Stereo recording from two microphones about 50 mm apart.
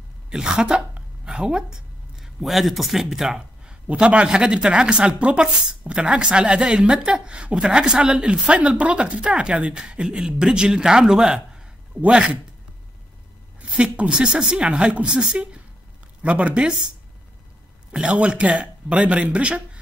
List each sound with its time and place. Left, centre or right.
0.3 s a woman's voice: centre
2.1 s speech: centre
3.8 s speech: right
13.6 s speech: right
17.9 s speech: centre